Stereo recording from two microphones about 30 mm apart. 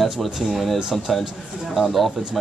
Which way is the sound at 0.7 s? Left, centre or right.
Centre.